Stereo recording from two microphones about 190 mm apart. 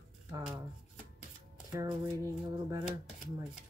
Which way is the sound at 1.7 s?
20° right (ahead or behind).